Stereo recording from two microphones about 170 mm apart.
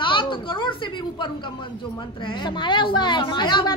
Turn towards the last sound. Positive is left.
turn(degrees=25)  # may be behind; listen again after turning